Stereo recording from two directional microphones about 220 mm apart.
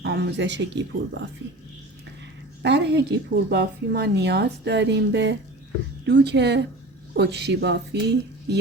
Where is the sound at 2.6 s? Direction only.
50° right (ahead or behind).